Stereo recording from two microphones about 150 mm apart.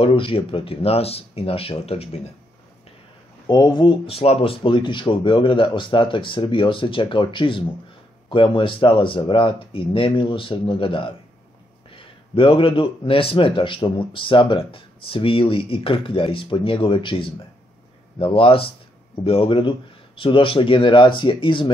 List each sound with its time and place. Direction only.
0.0 s a man's voice: 35° left (ahead or behind)
3.4 s speech: 25° left (ahead or behind)
4.1 s a man's voice: 40° left (ahead or behind)